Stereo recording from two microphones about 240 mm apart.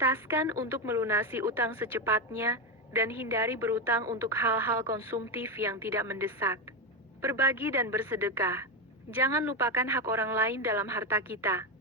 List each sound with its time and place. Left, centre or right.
0.0 s a woman's voice: centre